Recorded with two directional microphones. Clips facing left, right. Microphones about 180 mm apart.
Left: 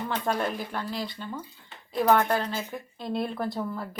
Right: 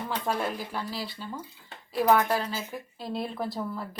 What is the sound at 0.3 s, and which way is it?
A woman's voice, 5° right (ahead or behind).